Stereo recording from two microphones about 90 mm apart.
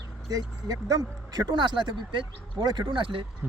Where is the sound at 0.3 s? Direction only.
40° right (ahead or behind).